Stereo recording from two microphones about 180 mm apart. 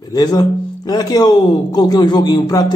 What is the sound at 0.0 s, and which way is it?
Speech, 20° left (ahead or behind).